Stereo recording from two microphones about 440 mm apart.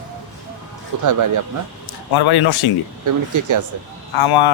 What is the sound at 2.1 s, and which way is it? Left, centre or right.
Speech, left.